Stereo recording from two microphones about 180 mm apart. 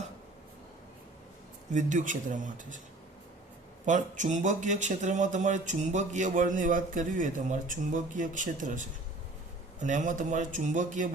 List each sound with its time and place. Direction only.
1.7 s speech: 45° right (ahead or behind)
3.8 s speech: 45° right (ahead or behind)